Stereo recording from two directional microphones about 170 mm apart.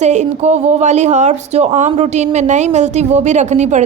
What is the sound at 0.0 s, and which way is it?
A woman's voice, 45° right (ahead or behind).